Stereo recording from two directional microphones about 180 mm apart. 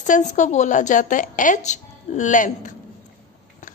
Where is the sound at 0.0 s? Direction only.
45° left (ahead or behind).